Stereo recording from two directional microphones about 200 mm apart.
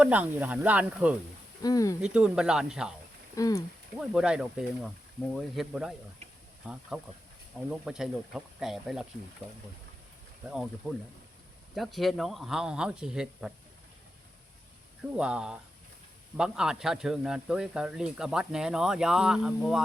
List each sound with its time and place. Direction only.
0.0 s speech: 5° right (ahead or behind)
1.6 s speech: 15° left (ahead or behind)
2.0 s speech: 5° right (ahead or behind)
3.3 s speech: 15° left (ahead or behind)
4.0 s speech: 5° right (ahead or behind)
10.5 s speech: centre (ahead or behind)
15.1 s speech: 5° right (ahead or behind)